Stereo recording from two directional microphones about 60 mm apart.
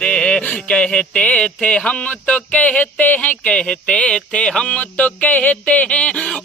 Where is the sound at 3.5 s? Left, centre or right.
Centre.